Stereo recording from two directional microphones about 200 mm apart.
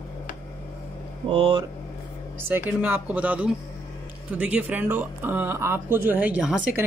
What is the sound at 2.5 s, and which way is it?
Speech, 10° right (ahead or behind).